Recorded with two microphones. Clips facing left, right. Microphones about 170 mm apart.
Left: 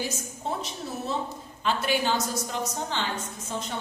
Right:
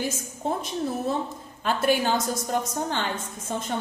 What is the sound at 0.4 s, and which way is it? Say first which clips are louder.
A woman's voice: right 6 dB; 50° right (ahead or behind).